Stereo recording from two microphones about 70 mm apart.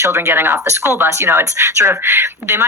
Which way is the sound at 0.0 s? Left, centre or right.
Right.